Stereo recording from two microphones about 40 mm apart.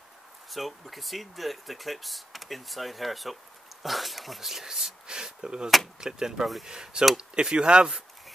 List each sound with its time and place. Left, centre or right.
0.5 s speech: centre
5.0 s speech: centre